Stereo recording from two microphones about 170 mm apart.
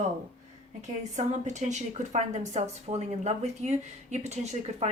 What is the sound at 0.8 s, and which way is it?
A woman's voice, 45° right (ahead or behind).